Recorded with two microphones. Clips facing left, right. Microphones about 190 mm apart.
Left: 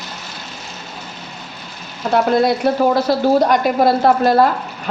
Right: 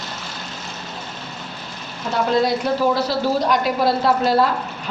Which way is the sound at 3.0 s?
50° left (ahead or behind).